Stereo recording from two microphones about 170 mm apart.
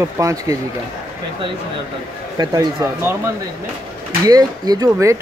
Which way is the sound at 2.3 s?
20° right (ahead or behind).